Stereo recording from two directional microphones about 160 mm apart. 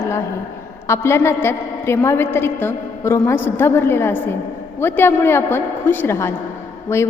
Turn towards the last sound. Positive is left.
turn(degrees=15)  # may be behind; listen again after turning